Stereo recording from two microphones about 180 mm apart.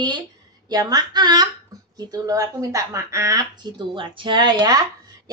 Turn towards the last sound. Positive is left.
turn(degrees=-20)  # may be behind; listen again after turning